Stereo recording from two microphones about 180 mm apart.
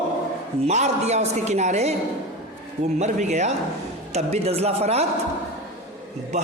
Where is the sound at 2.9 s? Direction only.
40° right (ahead or behind).